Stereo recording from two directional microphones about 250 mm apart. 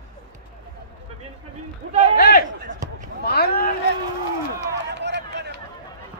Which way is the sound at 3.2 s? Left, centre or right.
Left.